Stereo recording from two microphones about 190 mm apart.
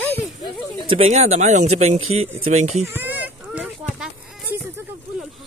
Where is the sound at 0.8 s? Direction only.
35° right (ahead or behind).